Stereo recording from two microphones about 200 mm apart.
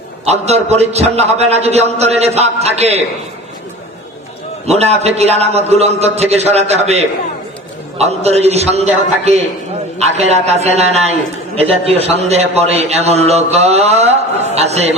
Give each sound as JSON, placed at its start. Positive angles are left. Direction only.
{"t": 0.3, "sound": "a man's voice", "side_deg": -30}
{"t": 4.6, "sound": "a man's voice", "side_deg": -30}
{"t": 10.0, "sound": "a man's voice", "side_deg": -35}